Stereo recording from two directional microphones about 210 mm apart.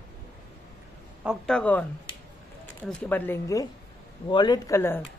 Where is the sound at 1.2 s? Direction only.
Centre (ahead or behind).